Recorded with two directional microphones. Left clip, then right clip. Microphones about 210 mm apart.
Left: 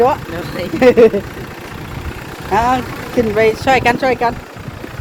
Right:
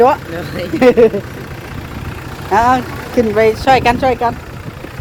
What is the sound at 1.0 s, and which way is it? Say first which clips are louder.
Speech: left 1 dB; 10° right (ahead or behind).